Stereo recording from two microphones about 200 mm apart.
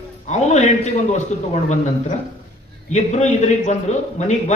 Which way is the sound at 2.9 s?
35° left (ahead or behind).